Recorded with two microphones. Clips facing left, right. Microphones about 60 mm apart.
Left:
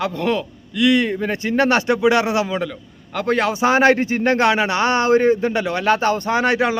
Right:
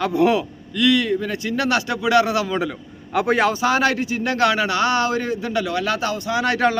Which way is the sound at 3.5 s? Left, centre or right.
Left.